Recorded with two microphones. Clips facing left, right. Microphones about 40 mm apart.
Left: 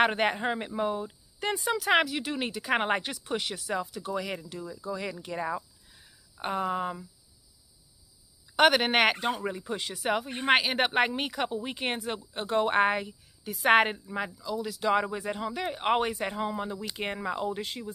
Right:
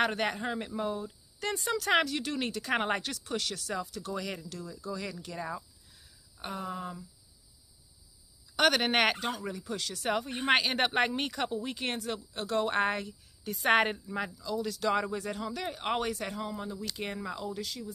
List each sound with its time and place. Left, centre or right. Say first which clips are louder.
0.0 s speech: left 5 dB; left
8.5 s speech: left 4 dB; centre
9.3 s speech: left 4 dB; left
10.0 s speech: left 3 dB; centre; by 17.9 s left